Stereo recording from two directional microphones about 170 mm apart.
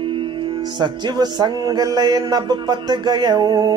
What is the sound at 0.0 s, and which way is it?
Music, 30° right (ahead or behind).